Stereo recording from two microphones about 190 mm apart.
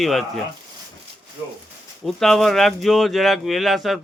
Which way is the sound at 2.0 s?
Centre (ahead or behind).